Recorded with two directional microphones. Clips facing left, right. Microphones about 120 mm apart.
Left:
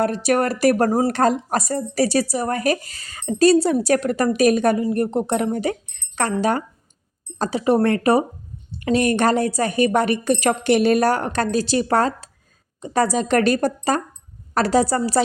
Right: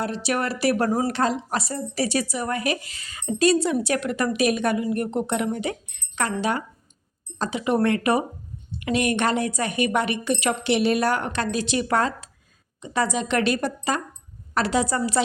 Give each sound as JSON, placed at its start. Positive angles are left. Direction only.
{"t": 0.0, "sound": "a woman's voice", "side_deg": 50}